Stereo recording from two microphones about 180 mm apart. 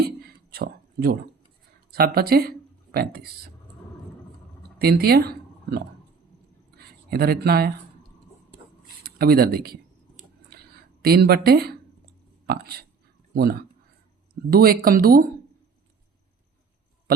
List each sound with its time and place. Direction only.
0.5 s a sound: 60° right (ahead or behind)
1.9 s speech: 60° right (ahead or behind)
4.8 s speech: 60° right (ahead or behind)
6.7 s a sound: 60° right (ahead or behind)
9.1 s speech: 60° right (ahead or behind)
11.0 s speech: 60° right (ahead or behind)